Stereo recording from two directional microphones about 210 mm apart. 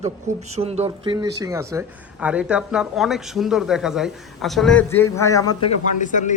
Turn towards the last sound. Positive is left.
turn(degrees=35)  # may be behind; listen again after turning